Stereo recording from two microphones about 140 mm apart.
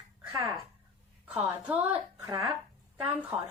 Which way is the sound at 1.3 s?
10° right (ahead or behind).